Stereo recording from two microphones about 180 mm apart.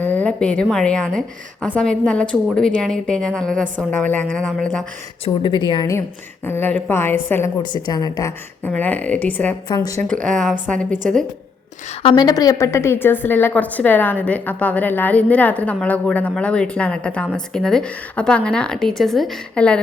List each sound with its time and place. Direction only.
0.0 s a woman's voice: 10° left (ahead or behind)
5.2 s a woman's voice: 25° left (ahead or behind)
6.4 s a woman's voice: 10° left (ahead or behind)
7.6 s a woman's voice: 25° left (ahead or behind)
8.6 s a woman's voice: 10° left (ahead or behind)
9.6 s a woman's voice: 20° left (ahead or behind)
10.7 s a woman's voice: 5° left (ahead or behind)
12.0 s a woman's voice: 20° left (ahead or behind); by 19.8 s 5° left (ahead or behind)